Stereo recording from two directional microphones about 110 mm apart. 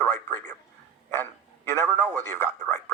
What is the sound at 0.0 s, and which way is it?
Speech, 15° left (ahead or behind).